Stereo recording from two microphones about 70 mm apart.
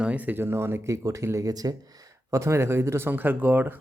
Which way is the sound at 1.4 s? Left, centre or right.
Right.